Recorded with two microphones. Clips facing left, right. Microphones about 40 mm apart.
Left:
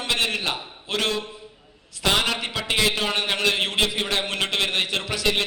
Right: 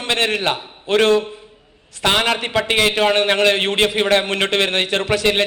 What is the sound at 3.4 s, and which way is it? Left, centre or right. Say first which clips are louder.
A man's voice: right 6 dB; right.